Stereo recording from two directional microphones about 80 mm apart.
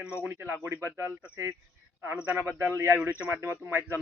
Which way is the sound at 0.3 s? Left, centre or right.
Right.